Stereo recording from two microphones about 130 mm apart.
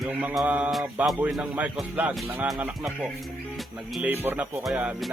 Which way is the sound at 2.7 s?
Centre (ahead or behind).